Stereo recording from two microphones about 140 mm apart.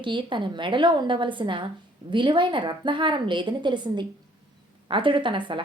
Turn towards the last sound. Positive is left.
turn(degrees=-35)  # may be behind; listen again after turning